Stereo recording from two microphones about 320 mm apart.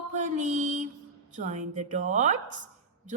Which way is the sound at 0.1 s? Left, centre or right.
Right.